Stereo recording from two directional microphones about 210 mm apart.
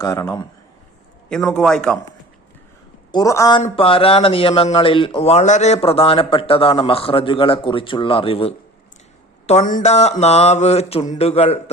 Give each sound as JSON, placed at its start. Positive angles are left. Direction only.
{"t": 0.0, "sound": "speech", "side_deg": 15}
{"t": 1.3, "sound": "a man's voice", "side_deg": 0}
{"t": 3.1, "sound": "speech", "side_deg": 15}
{"t": 3.6, "sound": "speech", "side_deg": 25}
{"t": 9.5, "sound": "mantra", "side_deg": 35}